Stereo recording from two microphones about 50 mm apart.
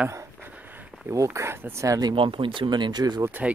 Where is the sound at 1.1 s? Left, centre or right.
Right.